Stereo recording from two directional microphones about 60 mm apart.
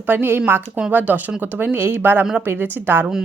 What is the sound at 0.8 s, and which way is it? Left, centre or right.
A woman's voice, right.